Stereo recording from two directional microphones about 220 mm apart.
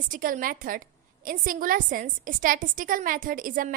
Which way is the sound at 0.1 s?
40° right (ahead or behind).